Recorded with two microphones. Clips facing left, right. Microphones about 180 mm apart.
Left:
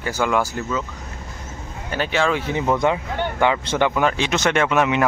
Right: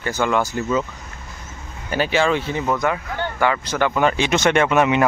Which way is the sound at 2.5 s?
15° left (ahead or behind).